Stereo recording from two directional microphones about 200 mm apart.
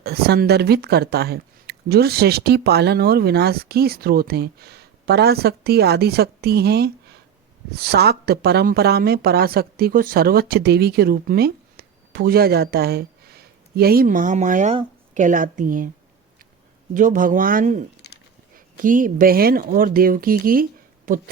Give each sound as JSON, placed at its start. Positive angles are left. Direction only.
{"t": 0.0, "sound": "speech", "side_deg": -50}
{"t": 16.9, "sound": "speech", "side_deg": -40}